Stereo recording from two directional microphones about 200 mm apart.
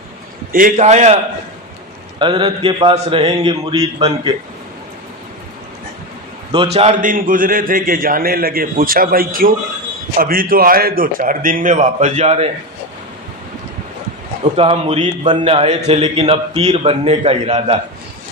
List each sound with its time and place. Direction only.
0.5 s a man's voice: 40° right (ahead or behind)
2.1 s speech: 25° right (ahead or behind)
6.5 s a man's voice: 25° right (ahead or behind)
14.5 s a man's voice: 30° right (ahead or behind)